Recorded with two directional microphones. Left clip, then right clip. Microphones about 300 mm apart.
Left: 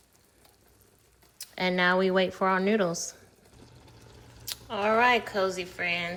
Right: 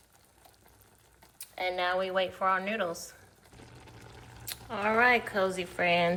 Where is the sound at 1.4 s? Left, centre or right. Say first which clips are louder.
Left 5 dB; left.